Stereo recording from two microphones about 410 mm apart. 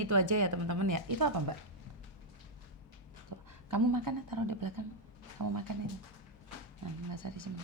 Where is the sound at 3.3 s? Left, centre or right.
Right.